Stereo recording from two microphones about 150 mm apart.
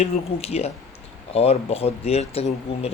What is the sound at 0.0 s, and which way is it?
Speech, 45° left (ahead or behind).